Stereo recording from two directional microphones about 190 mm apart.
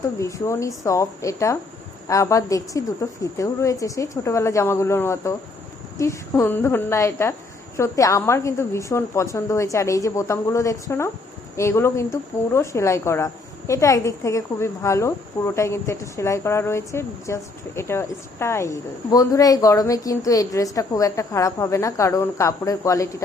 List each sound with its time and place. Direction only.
0.2 s speech: 15° left (ahead or behind)